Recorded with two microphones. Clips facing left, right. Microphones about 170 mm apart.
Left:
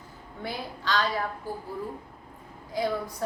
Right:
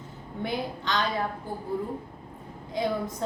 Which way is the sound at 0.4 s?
20° right (ahead or behind).